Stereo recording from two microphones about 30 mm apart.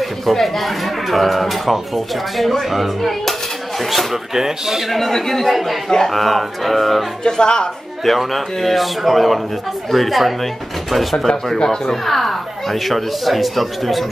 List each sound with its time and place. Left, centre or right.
0.0 s speech: centre
4.3 s speech: centre
4.9 s speech: centre
5.5 s speech: centre
5.9 s speech: centre
6.1 s speech: centre
7.2 s speech: left
8.2 s speech: centre
11.5 s speech: centre
11.9 s speech: centre